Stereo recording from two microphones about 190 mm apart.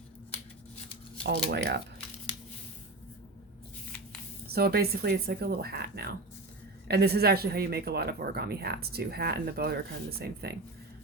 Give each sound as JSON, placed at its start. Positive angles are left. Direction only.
{"t": 1.5, "sound": "speech", "side_deg": -60}
{"t": 4.4, "sound": "speech", "side_deg": -55}